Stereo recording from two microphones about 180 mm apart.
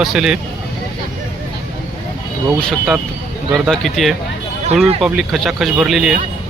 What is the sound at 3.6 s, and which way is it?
Speech, centre (ahead or behind).